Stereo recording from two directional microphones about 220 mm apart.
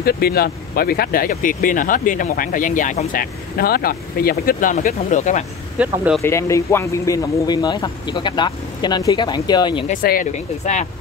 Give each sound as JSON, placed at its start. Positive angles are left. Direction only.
{"t": 0.0, "sound": "speech", "side_deg": 45}
{"t": 5.8, "sound": "speech", "side_deg": -5}
{"t": 6.2, "sound": "speech", "side_deg": 15}
{"t": 9.8, "sound": "speech", "side_deg": 35}